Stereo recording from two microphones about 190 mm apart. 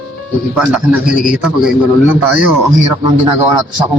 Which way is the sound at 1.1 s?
45° left (ahead or behind).